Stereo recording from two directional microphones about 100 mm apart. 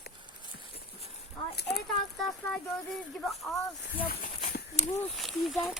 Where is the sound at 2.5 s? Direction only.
5° left (ahead or behind).